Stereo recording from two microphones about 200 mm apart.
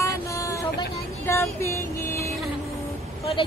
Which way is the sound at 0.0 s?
15° left (ahead or behind).